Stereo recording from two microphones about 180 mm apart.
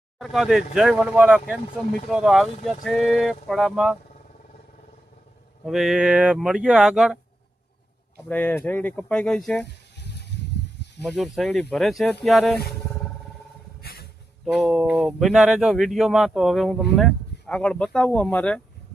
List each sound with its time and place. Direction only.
0.2 s speech: centre (ahead or behind)
5.6 s speech: centre (ahead or behind)
8.3 s speech: 10° left (ahead or behind)
9.6 s a sound: 70° left (ahead or behind)
11.0 s speech: centre (ahead or behind)
13.8 s a sound: 60° left (ahead or behind)
14.4 s speech: centre (ahead or behind)